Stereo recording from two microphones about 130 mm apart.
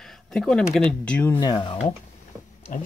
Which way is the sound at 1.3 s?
35° left (ahead or behind).